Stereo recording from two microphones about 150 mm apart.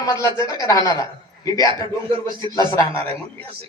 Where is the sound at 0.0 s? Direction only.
20° left (ahead or behind).